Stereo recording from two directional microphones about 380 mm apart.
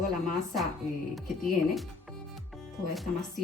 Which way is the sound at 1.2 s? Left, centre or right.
Centre.